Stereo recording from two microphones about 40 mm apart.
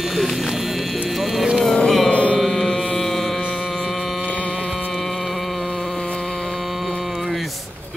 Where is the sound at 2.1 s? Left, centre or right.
Left.